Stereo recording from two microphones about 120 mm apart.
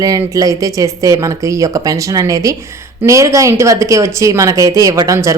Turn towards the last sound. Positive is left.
turn(degrees=-25)  # may be behind; listen again after turning